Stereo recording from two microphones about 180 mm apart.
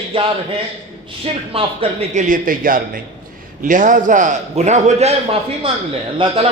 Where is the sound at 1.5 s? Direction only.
30° right (ahead or behind).